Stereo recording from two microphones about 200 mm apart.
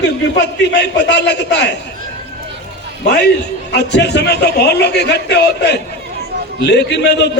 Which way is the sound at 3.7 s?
55° left (ahead or behind).